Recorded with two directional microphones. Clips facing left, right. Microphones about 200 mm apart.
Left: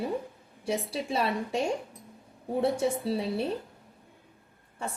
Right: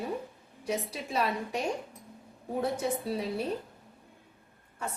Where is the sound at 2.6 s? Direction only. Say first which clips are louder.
Left 4 dB; 30° left (ahead or behind).